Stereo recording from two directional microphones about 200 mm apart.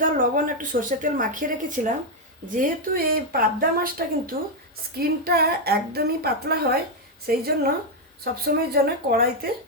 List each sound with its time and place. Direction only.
0.0 s a woman's voice: 40° right (ahead or behind)